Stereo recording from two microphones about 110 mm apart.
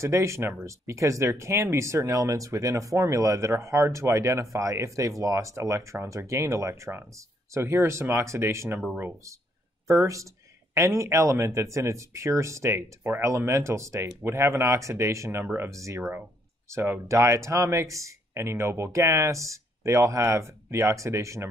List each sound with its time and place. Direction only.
0.0 s speech: 25° right (ahead or behind)